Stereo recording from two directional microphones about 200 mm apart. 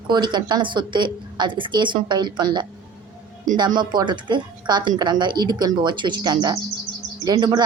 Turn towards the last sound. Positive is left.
turn(degrees=-20)  # may be behind; listen again after turning